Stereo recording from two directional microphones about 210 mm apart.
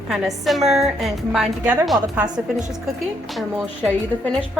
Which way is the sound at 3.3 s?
Centre (ahead or behind).